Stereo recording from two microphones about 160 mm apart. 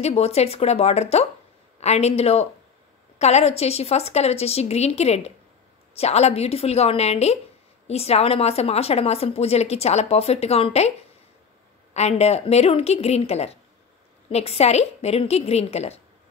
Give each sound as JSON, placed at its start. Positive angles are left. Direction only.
{"t": 0.0, "sound": "a woman's voice", "side_deg": 40}
{"t": 11.9, "sound": "a woman's voice", "side_deg": 45}